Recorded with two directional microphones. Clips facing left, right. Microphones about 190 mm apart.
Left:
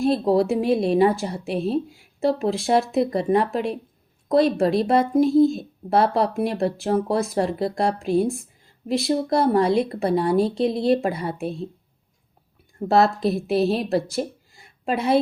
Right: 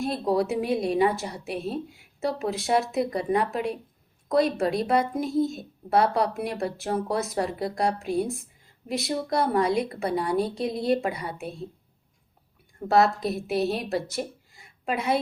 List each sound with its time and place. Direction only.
0.0 s a woman's voice: 30° left (ahead or behind)
12.9 s a woman's voice: 30° left (ahead or behind)